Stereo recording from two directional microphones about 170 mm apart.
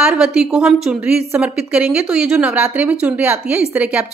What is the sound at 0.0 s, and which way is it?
A woman's voice, 5° right (ahead or behind).